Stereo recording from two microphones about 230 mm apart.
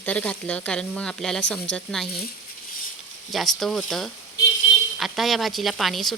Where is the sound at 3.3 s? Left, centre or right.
Centre.